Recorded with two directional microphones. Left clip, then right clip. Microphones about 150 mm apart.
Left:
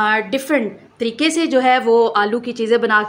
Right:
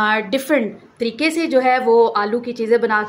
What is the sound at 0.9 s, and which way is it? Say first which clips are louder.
A woman's voice: left 1 dB; 10° left (ahead or behind).